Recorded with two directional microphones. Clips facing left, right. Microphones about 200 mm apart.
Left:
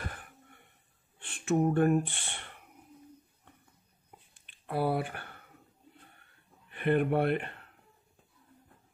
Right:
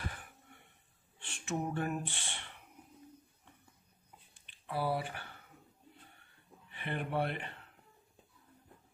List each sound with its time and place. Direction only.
1.2 s a sound: 55° left (ahead or behind)
4.5 s speech: 55° left (ahead or behind)
6.7 s speech: 55° left (ahead or behind)